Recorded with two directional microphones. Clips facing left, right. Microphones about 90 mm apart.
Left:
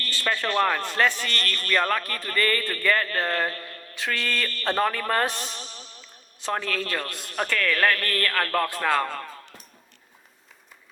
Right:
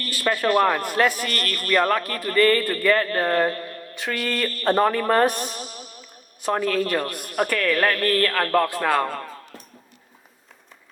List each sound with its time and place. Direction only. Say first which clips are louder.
0.2 s a man's voice: right 5 dB; 20° right (ahead or behind)
4.0 s a woman's voice: right 3 dB; 15° right (ahead or behind)
5.6 s music: right 5 dB; 30° left (ahead or behind)
6.4 s a woman's voice: right 6 dB; 20° right (ahead or behind)